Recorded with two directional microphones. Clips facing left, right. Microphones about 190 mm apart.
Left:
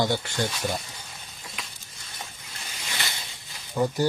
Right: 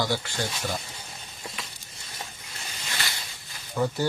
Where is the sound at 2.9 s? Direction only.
20° left (ahead or behind).